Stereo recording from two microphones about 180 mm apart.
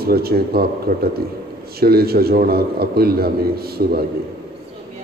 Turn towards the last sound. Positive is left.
turn(degrees=-60)  # may be behind; listen again after turning